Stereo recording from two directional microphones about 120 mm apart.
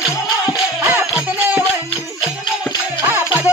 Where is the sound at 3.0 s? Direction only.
15° right (ahead or behind).